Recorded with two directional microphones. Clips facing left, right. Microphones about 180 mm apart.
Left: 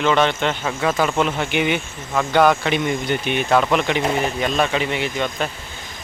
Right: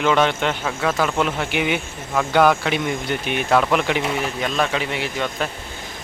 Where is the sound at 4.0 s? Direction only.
40° left (ahead or behind).